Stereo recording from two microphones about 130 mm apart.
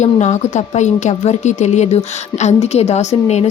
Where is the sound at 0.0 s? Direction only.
65° left (ahead or behind).